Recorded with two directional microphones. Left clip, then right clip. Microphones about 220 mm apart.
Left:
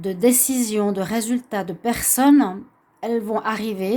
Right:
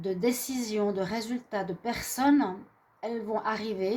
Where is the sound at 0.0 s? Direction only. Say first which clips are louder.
Left 10 dB; 50° left (ahead or behind).